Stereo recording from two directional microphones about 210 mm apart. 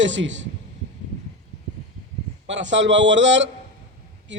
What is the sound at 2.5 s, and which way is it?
A man's voice, 60° right (ahead or behind).